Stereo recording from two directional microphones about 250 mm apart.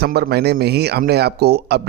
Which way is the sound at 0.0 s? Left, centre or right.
Right.